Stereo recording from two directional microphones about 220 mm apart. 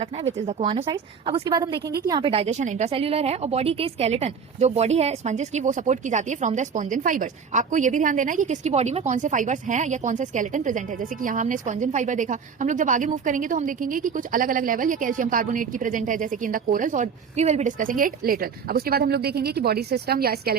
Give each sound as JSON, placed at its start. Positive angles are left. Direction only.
{"t": 0.3, "sound": "a woman's voice", "side_deg": -25}